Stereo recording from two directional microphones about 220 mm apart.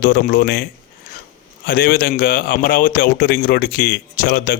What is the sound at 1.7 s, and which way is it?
Speech, 40° left (ahead or behind).